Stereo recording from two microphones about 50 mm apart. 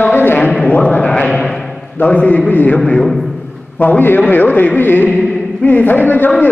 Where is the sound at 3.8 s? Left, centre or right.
Left.